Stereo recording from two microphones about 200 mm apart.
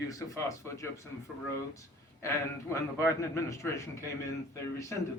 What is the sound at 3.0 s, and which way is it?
Speech, 15° left (ahead or behind).